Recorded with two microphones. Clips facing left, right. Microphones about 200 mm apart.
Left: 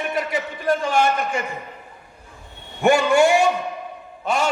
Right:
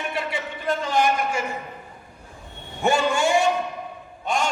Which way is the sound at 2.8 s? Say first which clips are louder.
Left 5 dB; 65° left (ahead or behind).